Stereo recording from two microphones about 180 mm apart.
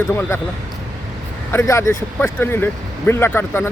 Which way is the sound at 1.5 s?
15° left (ahead or behind).